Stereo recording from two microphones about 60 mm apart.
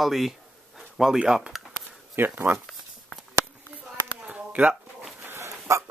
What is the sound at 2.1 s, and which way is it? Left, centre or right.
Speech, right.